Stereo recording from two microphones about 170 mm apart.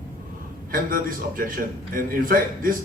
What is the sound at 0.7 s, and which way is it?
A man's voice, 55° right (ahead or behind).